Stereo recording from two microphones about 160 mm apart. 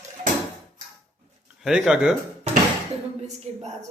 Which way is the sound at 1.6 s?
5° right (ahead or behind).